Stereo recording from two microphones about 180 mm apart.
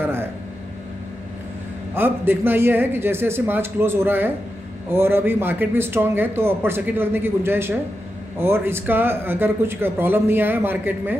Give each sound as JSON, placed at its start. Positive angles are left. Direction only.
{"t": 2.0, "sound": "speech", "side_deg": -10}